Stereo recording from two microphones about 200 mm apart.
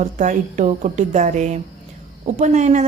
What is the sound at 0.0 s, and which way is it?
Speech, 40° right (ahead or behind).